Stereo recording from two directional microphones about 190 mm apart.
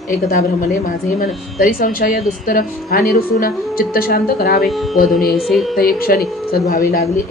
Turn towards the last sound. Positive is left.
turn(degrees=50)  # may be behind; listen again after turning